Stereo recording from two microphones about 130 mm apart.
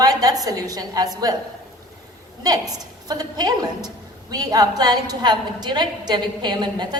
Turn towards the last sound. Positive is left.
turn(degrees=-35)  # may be behind; listen again after turning